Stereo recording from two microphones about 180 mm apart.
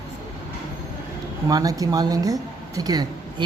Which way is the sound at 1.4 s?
20° right (ahead or behind).